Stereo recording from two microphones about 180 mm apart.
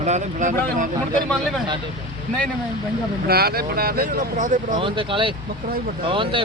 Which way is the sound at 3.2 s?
60° right (ahead or behind).